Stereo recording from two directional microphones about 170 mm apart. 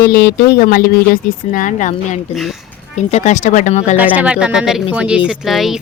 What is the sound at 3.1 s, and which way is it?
Speech, 45° left (ahead or behind).